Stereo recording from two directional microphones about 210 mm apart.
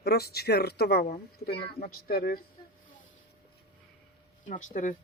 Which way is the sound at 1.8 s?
45° left (ahead or behind).